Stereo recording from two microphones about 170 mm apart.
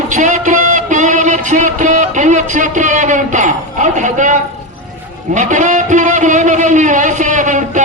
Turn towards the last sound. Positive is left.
turn(degrees=-45)  # may be behind; listen again after turning